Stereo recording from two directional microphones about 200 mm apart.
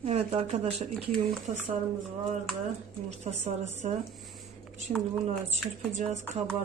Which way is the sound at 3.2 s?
35° right (ahead or behind).